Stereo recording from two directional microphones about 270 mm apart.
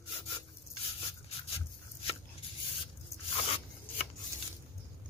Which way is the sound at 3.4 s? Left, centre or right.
Left.